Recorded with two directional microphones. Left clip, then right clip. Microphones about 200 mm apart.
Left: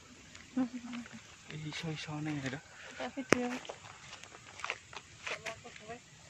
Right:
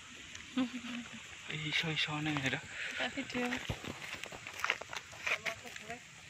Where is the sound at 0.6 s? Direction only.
35° left (ahead or behind).